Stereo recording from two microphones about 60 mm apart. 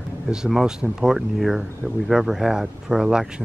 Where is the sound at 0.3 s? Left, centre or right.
Centre.